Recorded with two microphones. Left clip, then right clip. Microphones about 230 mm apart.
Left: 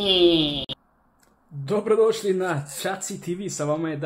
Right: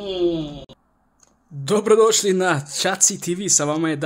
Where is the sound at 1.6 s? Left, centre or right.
Right.